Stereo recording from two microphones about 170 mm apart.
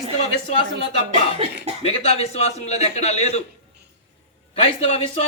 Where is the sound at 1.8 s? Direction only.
40° left (ahead or behind).